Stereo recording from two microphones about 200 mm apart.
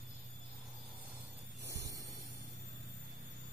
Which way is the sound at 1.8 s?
15° right (ahead or behind).